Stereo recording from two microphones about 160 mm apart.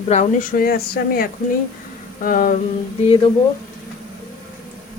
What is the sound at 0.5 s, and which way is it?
Speech, 65° left (ahead or behind).